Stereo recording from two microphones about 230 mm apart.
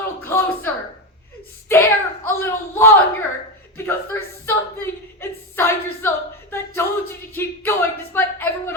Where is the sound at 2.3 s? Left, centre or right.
Centre.